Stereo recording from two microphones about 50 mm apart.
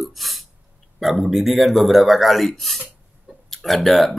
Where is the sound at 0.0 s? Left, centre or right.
Centre.